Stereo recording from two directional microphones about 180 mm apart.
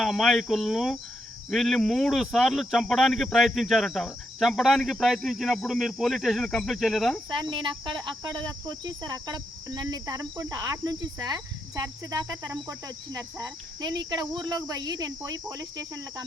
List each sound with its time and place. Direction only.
0.0 s speech: centre (ahead or behind)
7.4 s cricket: 25° right (ahead or behind)